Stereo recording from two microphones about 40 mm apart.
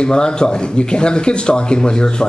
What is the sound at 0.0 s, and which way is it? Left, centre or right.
A man's voice, left.